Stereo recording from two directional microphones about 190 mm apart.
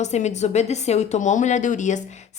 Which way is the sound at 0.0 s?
35° left (ahead or behind).